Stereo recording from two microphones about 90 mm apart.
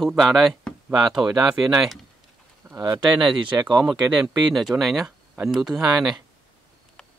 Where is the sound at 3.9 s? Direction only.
5° right (ahead or behind).